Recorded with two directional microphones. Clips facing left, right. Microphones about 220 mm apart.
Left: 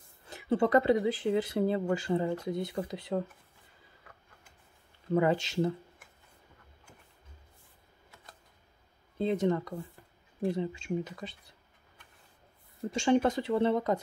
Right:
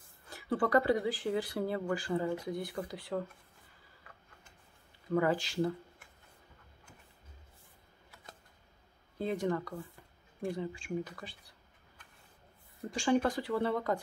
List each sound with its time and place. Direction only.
0.3 s speech: 20° left (ahead or behind)
5.1 s speech: 25° left (ahead or behind)
9.2 s speech: 25° left (ahead or behind)
12.9 s speech: 25° left (ahead or behind)